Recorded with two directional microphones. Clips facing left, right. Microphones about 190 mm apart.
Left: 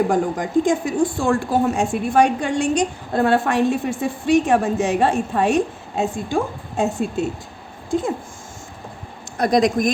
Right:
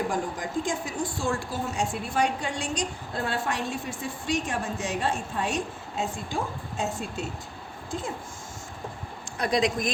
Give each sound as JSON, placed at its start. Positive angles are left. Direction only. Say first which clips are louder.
{"t": 0.1, "sound": "a woman's voice", "louder": "left 10 dB", "side_deg": 60}
{"t": 9.4, "sound": "speech", "louder": "left 8 dB", "side_deg": 45}